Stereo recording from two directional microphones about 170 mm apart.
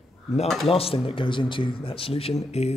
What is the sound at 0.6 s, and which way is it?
Speech, 35° left (ahead or behind).